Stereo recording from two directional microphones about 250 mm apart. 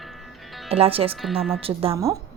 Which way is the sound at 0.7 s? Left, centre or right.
Right.